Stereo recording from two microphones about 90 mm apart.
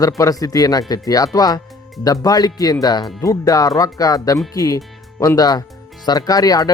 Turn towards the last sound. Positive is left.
turn(degrees=45)  # may be behind; listen again after turning